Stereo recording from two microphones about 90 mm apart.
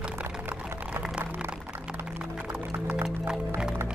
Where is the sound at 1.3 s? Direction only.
15° right (ahead or behind).